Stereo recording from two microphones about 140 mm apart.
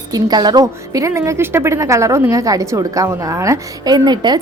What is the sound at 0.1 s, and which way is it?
A woman's voice, 30° right (ahead or behind).